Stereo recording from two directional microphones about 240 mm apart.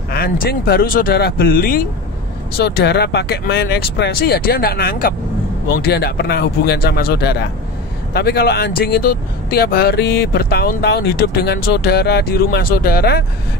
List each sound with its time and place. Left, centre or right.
0.1 s speech: left